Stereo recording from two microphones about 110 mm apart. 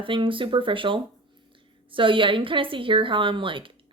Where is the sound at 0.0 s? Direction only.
50° right (ahead or behind).